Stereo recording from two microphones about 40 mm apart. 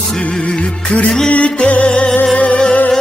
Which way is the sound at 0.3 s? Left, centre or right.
Left.